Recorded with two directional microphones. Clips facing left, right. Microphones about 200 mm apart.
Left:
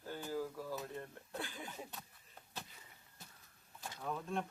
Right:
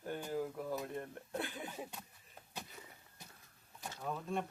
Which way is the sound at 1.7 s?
10° right (ahead or behind).